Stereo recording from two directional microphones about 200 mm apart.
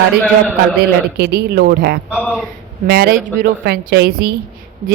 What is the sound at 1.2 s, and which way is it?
Speech, 50° right (ahead or behind).